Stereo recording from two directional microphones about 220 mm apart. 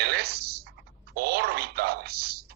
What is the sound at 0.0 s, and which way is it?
Typing, 45° right (ahead or behind).